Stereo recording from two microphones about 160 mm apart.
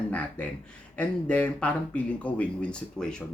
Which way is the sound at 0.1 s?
10° left (ahead or behind).